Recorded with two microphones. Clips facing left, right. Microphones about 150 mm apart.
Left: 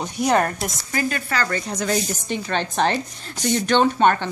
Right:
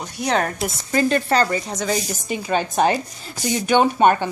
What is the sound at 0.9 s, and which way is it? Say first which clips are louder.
Speech: right 7 dB; 30° right (ahead or behind).